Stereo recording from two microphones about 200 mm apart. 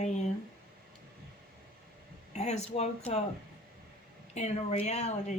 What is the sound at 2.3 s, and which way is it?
Speech, 35° left (ahead or behind).